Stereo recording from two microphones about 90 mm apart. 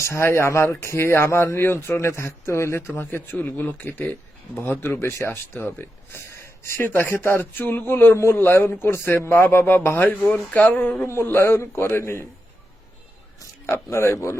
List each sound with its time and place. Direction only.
0.0 s a man's voice: 30° left (ahead or behind)
13.7 s a man's voice: 30° left (ahead or behind)